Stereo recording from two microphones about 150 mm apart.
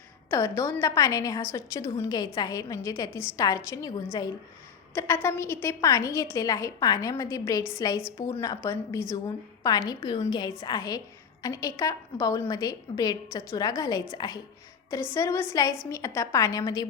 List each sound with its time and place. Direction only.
0.3 s a woman's voice: 20° left (ahead or behind)